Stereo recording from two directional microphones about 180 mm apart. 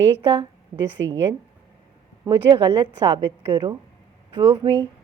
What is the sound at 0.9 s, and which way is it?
Speech, 90° right.